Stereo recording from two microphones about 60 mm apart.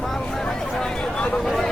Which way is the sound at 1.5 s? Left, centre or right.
Centre.